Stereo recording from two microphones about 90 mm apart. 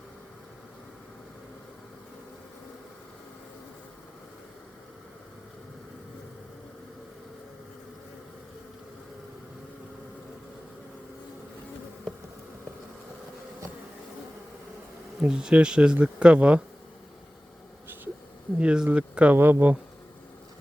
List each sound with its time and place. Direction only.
15.2 s speech: 10° right (ahead or behind)
18.5 s speech: 10° right (ahead or behind)